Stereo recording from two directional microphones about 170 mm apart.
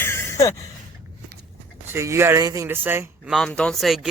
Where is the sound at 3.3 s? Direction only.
5° left (ahead or behind).